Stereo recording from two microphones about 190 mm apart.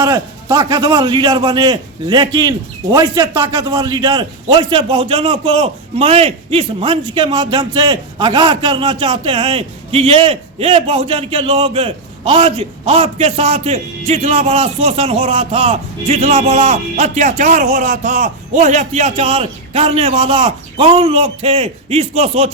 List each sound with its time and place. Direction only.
0.0 s a man's voice: 15° right (ahead or behind)